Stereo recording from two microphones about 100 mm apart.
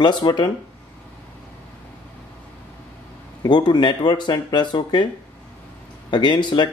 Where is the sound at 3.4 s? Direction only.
45° left (ahead or behind).